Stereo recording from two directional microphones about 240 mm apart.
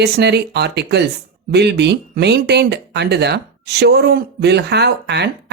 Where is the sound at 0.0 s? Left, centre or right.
Right.